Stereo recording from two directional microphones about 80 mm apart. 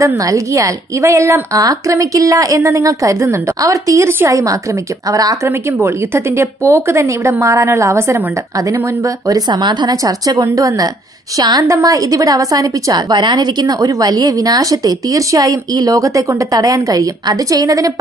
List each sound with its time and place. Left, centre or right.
0.0 s a woman's voice: right
5.5 s a woman's voice: right
9.5 s a woman's voice: right
11.3 s a woman's voice: right
11.6 s a woman's voice: right
13.1 s a woman's voice: right